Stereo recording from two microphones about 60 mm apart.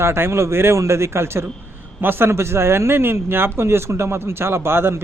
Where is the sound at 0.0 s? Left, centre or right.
Right.